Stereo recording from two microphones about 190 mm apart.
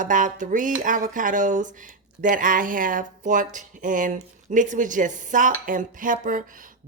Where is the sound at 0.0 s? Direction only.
45° right (ahead or behind).